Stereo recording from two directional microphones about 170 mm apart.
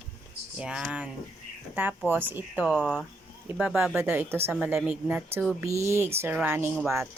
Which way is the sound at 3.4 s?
10° right (ahead or behind).